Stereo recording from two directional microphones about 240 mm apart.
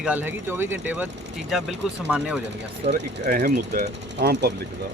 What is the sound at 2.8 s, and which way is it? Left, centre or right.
Speech, right.